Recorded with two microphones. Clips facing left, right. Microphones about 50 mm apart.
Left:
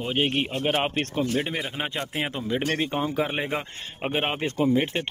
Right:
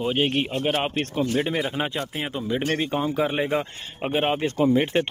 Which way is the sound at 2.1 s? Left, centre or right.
Left.